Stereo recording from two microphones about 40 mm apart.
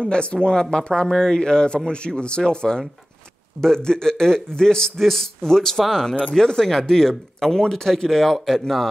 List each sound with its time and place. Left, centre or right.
0.0 s speech: left; by 8.8 s centre